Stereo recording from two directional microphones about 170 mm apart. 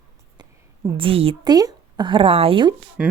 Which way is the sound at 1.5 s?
25° right (ahead or behind).